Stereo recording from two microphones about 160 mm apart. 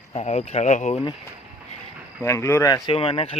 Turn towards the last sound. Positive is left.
turn(degrees=35)  # may be behind; listen again after turning